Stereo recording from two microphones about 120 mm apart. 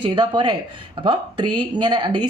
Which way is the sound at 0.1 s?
40° right (ahead or behind).